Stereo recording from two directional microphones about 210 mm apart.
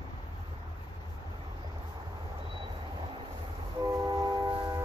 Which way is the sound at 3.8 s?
20° right (ahead or behind).